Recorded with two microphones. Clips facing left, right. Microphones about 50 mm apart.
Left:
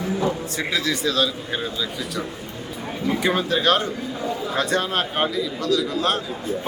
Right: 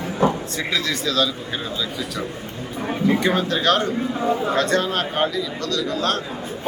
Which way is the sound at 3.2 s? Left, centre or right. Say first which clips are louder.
Right 1 dB; centre.